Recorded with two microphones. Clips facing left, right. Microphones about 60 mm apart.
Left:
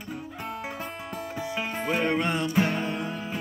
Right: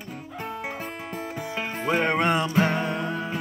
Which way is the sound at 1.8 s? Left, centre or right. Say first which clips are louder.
Right 4 dB; right.